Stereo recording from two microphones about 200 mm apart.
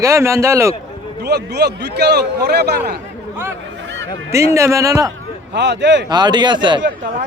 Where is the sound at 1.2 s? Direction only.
55° right (ahead or behind).